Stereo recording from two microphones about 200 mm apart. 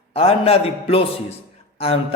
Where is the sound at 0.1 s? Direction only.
30° left (ahead or behind).